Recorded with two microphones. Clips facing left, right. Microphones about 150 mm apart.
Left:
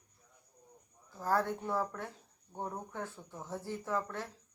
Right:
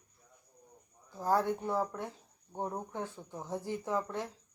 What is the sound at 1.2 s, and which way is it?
Speech, 15° right (ahead or behind).